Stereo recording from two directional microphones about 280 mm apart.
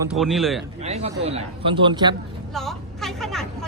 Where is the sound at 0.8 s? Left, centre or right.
Right.